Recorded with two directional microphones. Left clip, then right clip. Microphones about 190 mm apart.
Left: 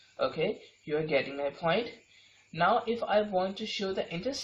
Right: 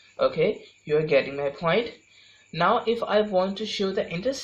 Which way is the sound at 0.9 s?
40° right (ahead or behind).